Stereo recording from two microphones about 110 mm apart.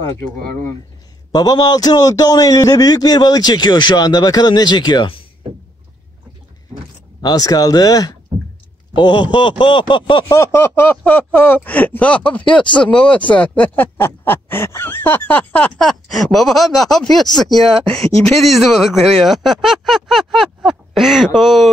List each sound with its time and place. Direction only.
1.3 s a man's voice: 40° left (ahead or behind)
7.2 s a man's voice: 35° left (ahead or behind)
8.9 s speech: 45° left (ahead or behind)
10.3 s speech: 25° left (ahead or behind)
15.9 s speech: centre (ahead or behind)